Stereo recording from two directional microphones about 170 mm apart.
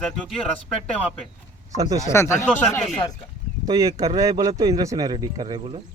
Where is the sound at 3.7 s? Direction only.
20° right (ahead or behind).